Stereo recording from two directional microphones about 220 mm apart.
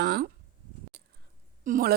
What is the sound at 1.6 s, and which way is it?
Speech, 40° right (ahead or behind).